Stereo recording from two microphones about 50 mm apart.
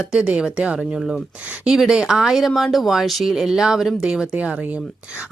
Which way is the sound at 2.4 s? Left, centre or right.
Centre.